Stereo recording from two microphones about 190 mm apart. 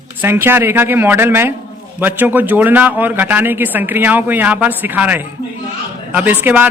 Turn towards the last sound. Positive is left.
turn(degrees=-10)  # may be behind; listen again after turning